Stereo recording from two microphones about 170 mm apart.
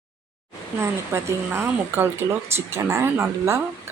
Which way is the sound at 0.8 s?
15° right (ahead or behind).